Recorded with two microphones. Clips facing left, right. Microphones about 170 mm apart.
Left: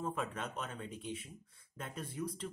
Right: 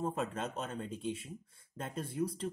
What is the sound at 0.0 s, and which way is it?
Speech, 30° right (ahead or behind).